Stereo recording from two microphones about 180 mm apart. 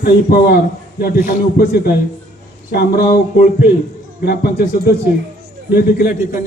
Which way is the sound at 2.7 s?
50° left (ahead or behind).